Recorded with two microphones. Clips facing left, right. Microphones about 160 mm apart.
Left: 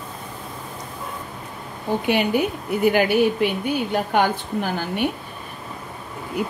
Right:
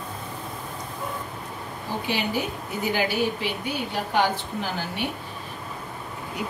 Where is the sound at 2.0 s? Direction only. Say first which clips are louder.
Left 7 dB; 60° left (ahead or behind).